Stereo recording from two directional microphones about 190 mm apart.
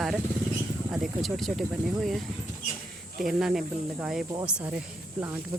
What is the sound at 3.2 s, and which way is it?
Speech, centre (ahead or behind).